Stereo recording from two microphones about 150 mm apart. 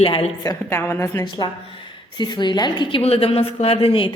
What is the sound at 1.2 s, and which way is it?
A woman's voice, 30° left (ahead or behind).